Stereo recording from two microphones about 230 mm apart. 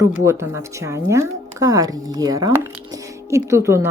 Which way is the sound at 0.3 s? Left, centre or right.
Centre.